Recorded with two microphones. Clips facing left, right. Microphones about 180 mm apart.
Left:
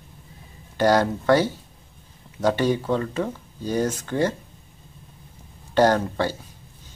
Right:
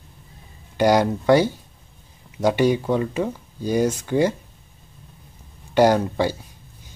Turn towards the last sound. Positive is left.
turn(degrees=-10)  # may be behind; listen again after turning